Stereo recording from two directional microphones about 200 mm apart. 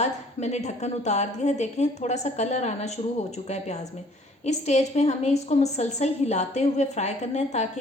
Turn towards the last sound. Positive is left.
turn(degrees=35)  # may be behind; listen again after turning